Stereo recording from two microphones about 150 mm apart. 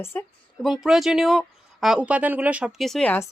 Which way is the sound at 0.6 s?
Centre (ahead or behind).